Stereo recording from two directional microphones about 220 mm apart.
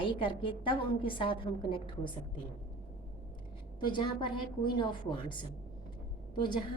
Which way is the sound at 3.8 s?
20° left (ahead or behind).